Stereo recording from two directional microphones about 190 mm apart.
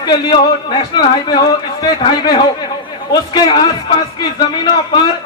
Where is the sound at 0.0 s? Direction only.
20° left (ahead or behind).